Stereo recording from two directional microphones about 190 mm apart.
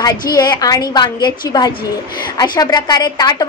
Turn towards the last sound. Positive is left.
turn(degrees=20)  # may be behind; listen again after turning